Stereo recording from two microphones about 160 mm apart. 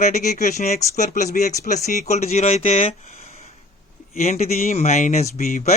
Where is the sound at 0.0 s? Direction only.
45° left (ahead or behind).